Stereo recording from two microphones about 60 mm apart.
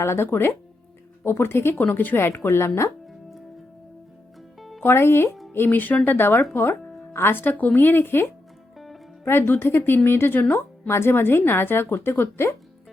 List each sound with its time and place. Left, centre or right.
0.0 s a woman's voice: left
3.1 s music: centre
4.8 s speech: left
5.5 s a woman's voice: left